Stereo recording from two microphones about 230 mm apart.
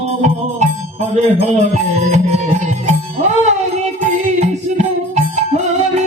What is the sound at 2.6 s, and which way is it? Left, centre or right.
Music, right.